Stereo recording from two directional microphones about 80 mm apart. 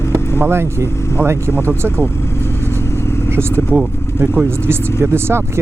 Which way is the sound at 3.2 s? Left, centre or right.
Right.